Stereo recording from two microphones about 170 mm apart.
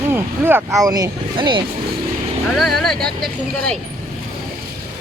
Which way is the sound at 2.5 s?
Centre (ahead or behind).